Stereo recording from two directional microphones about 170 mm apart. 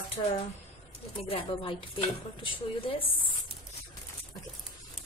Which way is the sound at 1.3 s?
30° left (ahead or behind).